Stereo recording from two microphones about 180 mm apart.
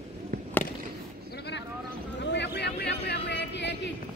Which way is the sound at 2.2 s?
75° left (ahead or behind).